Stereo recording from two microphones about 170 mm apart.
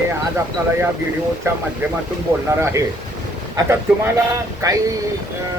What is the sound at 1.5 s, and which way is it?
Speech, 15° right (ahead or behind).